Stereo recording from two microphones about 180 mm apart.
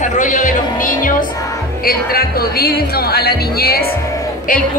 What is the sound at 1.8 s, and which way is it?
Speech, 55° left (ahead or behind).